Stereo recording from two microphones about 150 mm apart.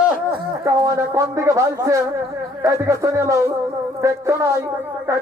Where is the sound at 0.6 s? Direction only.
20° right (ahead or behind).